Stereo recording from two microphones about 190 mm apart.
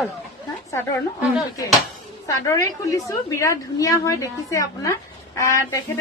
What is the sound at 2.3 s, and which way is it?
A man's voice, 15° left (ahead or behind).